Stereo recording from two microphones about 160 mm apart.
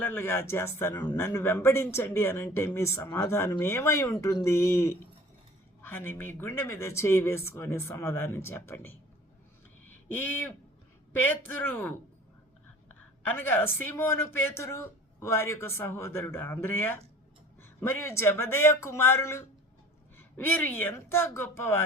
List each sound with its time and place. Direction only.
0.0 s speech: 15° left (ahead or behind)
10.2 s speech: 10° left (ahead or behind)
13.2 s speech: 15° left (ahead or behind)